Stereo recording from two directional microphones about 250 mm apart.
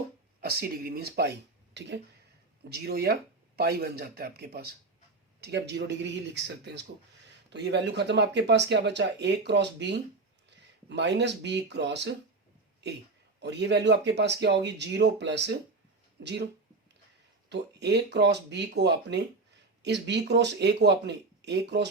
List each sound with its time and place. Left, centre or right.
0.4 s speech: right
2.6 s speech: right
13.4 s speech: right
17.5 s speech: right